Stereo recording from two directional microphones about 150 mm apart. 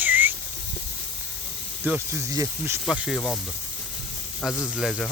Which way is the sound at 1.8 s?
15° right (ahead or behind).